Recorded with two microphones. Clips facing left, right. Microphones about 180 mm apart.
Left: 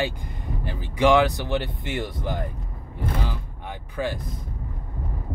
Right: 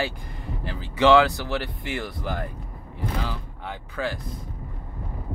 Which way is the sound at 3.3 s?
15° left (ahead or behind).